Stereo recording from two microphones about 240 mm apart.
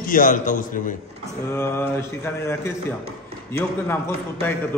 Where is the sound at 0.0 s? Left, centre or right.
Left.